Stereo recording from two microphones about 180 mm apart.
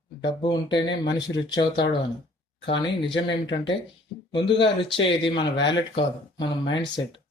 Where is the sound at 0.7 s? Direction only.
90° left.